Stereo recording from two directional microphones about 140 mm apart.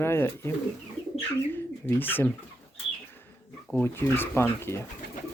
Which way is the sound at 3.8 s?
15° left (ahead or behind).